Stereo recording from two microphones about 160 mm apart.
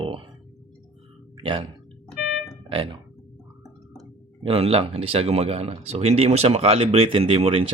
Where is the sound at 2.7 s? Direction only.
35° right (ahead or behind).